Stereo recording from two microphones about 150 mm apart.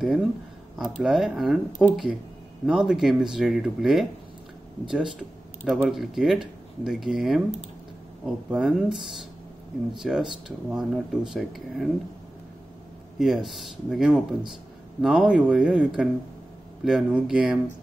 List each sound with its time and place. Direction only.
0.0 s speech: centre (ahead or behind)
8.5 s speech: 5° right (ahead or behind)
13.2 s speech: centre (ahead or behind)